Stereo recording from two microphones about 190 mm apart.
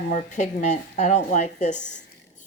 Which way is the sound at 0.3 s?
35° left (ahead or behind).